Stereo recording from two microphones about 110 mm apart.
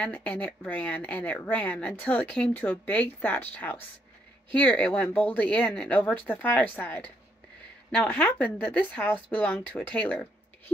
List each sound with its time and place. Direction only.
0.0 s speech: 15° left (ahead or behind)